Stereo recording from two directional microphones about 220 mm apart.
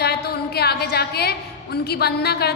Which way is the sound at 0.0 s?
45° left (ahead or behind).